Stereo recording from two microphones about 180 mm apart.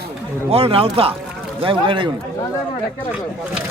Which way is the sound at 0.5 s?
30° right (ahead or behind).